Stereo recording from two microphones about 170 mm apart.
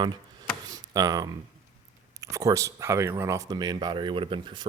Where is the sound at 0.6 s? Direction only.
20° right (ahead or behind).